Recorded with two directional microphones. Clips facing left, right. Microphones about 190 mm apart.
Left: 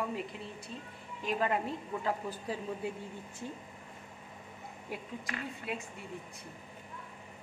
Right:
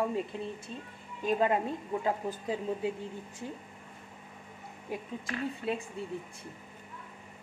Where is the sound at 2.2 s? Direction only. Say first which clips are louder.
Right 4 dB; 20° right (ahead or behind).